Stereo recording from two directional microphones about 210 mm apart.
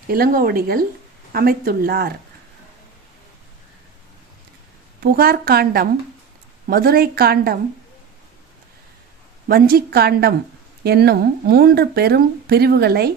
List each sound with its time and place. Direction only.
0.1 s speech: 45° right (ahead or behind)
4.9 s speech: 45° right (ahead or behind)
9.5 s speech: 45° right (ahead or behind)